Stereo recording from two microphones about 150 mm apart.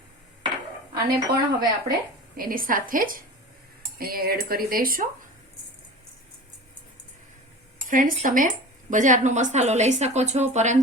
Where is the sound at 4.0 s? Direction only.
80° right.